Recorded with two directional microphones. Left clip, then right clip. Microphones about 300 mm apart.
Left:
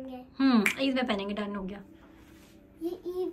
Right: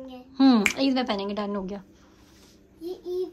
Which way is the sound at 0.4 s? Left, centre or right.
Centre.